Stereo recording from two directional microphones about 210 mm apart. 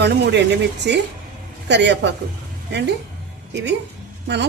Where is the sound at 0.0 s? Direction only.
55° right (ahead or behind).